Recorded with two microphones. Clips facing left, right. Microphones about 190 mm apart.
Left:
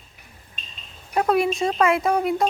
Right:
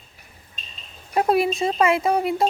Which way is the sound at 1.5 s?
Centre (ahead or behind).